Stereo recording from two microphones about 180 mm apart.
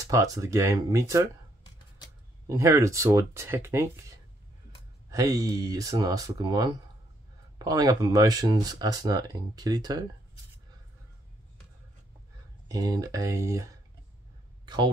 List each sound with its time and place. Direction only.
0.0 s speech: 20° right (ahead or behind)
2.4 s speech: 15° right (ahead or behind)
5.1 s speech: 20° right (ahead or behind)
12.6 s speech: 20° right (ahead or behind)